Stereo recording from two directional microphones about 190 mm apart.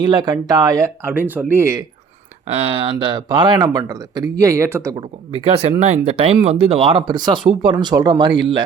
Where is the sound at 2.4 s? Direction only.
35° right (ahead or behind); by 5.0 s 15° right (ahead or behind).